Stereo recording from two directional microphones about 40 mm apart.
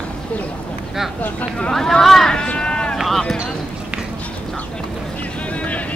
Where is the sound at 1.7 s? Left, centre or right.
Centre.